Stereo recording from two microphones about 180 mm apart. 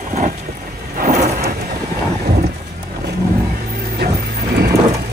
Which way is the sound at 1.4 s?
60° right (ahead or behind).